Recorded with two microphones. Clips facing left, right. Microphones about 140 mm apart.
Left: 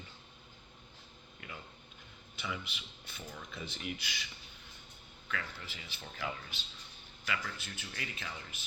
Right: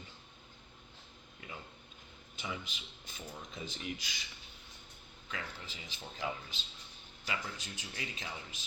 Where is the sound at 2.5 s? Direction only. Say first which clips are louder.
Left 1 dB; 40° right (ahead or behind).